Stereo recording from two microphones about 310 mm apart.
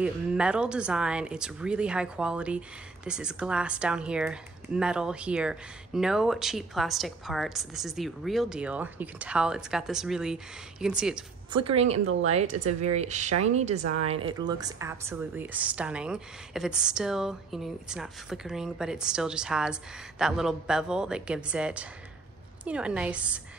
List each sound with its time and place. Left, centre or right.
0.0 s speech: centre
11.5 s a woman's voice: centre